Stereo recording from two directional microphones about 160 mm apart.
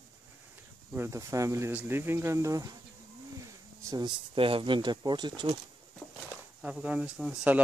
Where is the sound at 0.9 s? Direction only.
15° right (ahead or behind).